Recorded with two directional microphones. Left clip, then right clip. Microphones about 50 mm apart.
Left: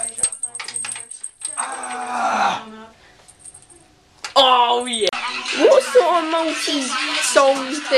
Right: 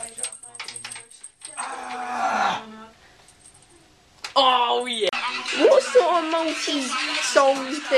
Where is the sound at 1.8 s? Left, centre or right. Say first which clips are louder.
Left 3 dB; centre.